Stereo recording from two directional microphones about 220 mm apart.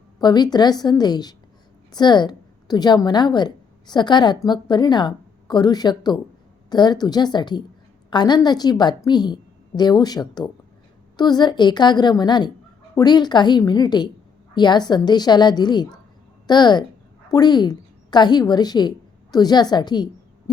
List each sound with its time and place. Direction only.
0.2 s a woman's voice: 20° left (ahead or behind)